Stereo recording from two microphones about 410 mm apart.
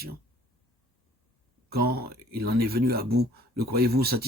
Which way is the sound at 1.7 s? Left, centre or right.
Right.